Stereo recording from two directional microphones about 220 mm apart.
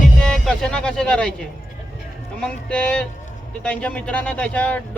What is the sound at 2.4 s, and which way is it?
Speech, 5° left (ahead or behind).